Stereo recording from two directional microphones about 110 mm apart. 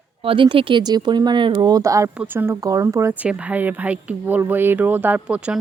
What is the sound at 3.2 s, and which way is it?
Speech, 15° right (ahead or behind).